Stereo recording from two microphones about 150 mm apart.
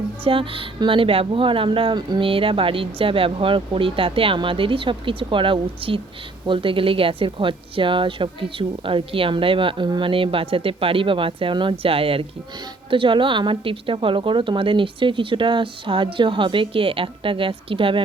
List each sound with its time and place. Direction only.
0.3 s a woman's voice: 35° right (ahead or behind)